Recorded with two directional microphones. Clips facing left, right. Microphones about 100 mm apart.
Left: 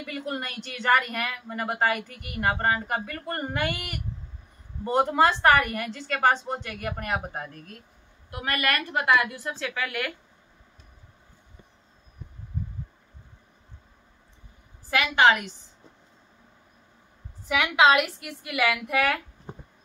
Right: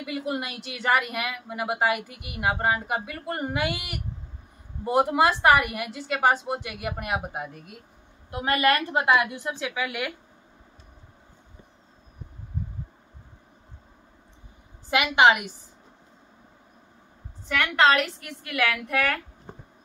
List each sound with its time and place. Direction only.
0.0 s a woman's voice: 10° right (ahead or behind)
8.3 s a woman's voice: 25° right (ahead or behind)
14.9 s a woman's voice: 15° right (ahead or behind)
17.5 s a woman's voice: 5° left (ahead or behind)